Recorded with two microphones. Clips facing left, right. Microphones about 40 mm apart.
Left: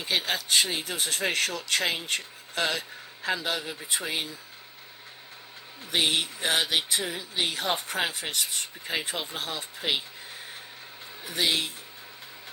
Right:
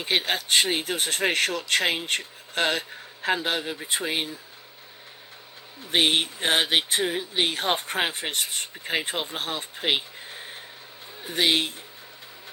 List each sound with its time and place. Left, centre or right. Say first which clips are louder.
0.0 s speech: right 3 dB; right
5.9 s speech: right 4 dB; right
11.2 s speech: right 4 dB; right